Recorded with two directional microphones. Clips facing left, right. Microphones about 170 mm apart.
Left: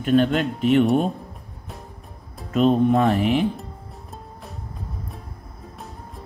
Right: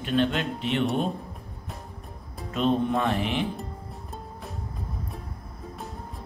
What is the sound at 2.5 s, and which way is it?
Speech, 40° left (ahead or behind).